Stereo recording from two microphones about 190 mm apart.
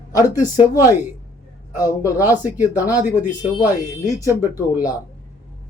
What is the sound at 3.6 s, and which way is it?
Speech, 15° right (ahead or behind).